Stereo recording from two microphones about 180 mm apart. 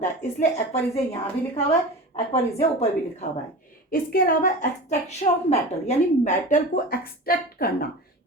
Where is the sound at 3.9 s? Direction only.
55° left (ahead or behind).